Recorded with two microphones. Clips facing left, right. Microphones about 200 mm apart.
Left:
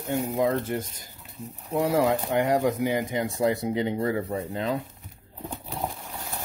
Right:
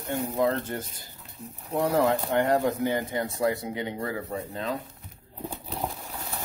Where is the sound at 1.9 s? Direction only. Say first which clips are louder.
Even; 10° left (ahead or behind).